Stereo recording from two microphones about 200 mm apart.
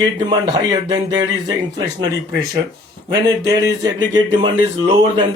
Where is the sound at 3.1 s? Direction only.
15° right (ahead or behind).